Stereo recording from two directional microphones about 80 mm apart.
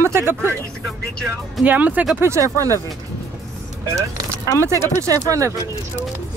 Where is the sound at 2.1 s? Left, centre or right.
Right.